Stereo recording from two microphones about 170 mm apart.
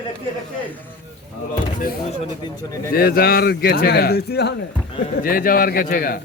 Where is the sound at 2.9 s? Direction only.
65° left (ahead or behind).